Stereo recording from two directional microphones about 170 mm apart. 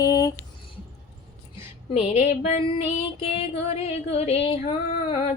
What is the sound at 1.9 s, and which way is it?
Female singing, 40° left (ahead or behind).